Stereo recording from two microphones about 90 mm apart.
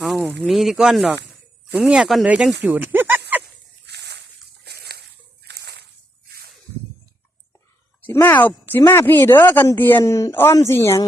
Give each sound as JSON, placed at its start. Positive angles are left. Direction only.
{"t": 0.3, "sound": "speech", "side_deg": 0}
{"t": 2.2, "sound": "a sound", "side_deg": -15}
{"t": 8.0, "sound": "speech", "side_deg": 20}
{"t": 10.0, "sound": "speech", "side_deg": 35}